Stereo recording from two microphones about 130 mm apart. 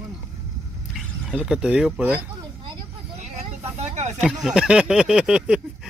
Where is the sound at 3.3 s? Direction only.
60° right (ahead or behind).